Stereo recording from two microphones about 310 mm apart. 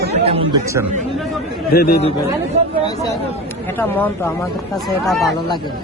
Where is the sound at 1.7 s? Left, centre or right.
Left.